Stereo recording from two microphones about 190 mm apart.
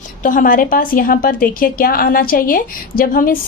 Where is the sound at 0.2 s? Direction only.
45° left (ahead or behind).